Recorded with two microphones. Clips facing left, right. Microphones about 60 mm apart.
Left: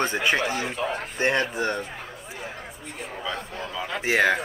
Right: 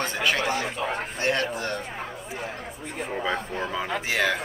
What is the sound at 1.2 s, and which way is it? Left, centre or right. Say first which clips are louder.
Speech: left 3 dB; centre.